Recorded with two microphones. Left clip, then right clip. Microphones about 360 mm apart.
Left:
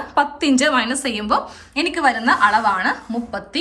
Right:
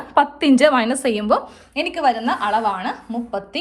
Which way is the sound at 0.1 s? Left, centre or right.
Centre.